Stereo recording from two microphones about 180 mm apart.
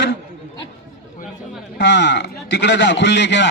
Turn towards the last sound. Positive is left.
turn(degrees=75)  # may be behind; listen again after turning